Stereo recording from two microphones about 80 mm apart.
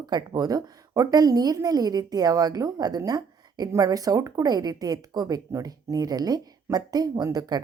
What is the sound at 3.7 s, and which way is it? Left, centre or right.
A woman's voice, right.